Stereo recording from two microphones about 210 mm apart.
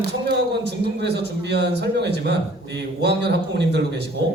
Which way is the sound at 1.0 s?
55° right (ahead or behind).